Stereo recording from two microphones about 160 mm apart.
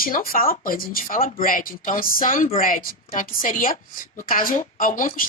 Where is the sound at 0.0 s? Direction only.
60° left (ahead or behind).